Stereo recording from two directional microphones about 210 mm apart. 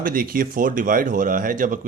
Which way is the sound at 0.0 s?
40° right (ahead or behind).